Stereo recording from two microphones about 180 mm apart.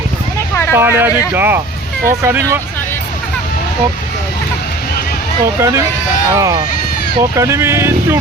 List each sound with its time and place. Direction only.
0.7 s speech: 10° right (ahead or behind)
5.5 s speech: 15° right (ahead or behind)